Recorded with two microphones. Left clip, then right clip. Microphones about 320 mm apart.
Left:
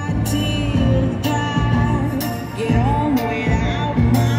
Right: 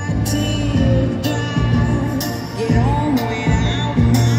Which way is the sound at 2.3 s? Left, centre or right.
Left.